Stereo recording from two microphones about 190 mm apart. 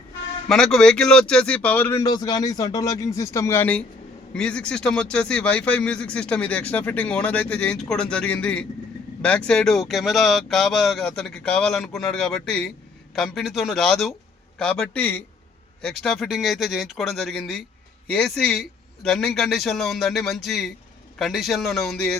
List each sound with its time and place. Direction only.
0.4 s speech: centre (ahead or behind)
2.0 s speech: 20° left (ahead or behind); by 22.2 s centre (ahead or behind)